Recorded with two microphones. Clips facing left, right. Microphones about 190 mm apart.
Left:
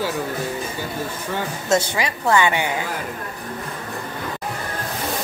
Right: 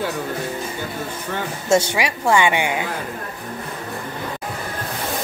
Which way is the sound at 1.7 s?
15° right (ahead or behind).